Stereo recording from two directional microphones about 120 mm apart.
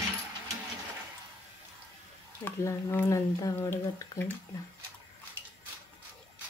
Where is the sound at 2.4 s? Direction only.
15° left (ahead or behind).